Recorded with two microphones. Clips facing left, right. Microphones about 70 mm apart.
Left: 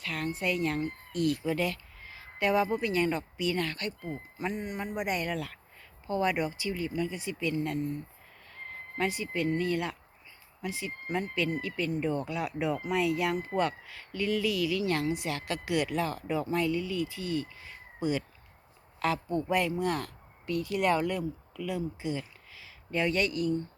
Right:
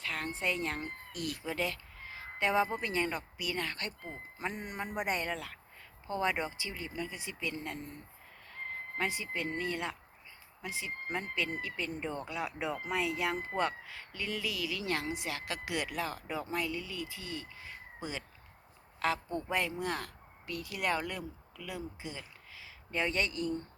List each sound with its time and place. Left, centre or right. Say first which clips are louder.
0.0 s a sound: left 3 dB; right
0.3 s speech: left 6 dB; right
3.0 s speech: left 6 dB; centre
3.8 s speech: left 5 dB; right
9.0 s speech: left 5 dB; right
18.9 s a man's voice: left 4 dB; right